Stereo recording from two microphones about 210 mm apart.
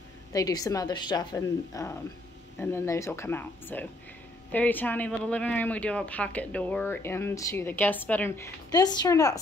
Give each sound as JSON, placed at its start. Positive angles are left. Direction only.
{"t": 0.3, "sound": "speech", "side_deg": 15}